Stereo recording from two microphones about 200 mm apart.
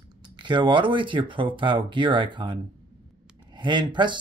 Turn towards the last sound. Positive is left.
turn(degrees=-25)  # may be behind; listen again after turning